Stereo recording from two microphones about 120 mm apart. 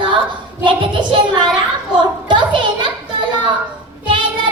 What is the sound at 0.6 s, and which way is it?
Child singing, 40° right (ahead or behind).